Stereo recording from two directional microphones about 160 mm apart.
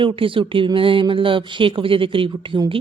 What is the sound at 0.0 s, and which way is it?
A woman's voice, 35° right (ahead or behind).